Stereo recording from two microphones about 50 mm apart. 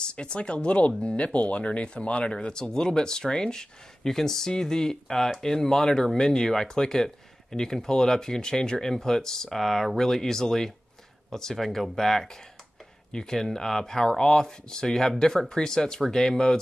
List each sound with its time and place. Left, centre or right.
0.0 s speech: centre